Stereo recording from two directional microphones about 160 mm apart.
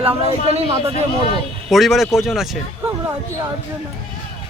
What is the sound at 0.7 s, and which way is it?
Speech, 30° right (ahead or behind).